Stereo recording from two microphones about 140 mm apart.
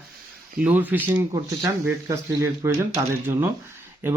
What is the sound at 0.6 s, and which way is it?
Speech, 10° right (ahead or behind).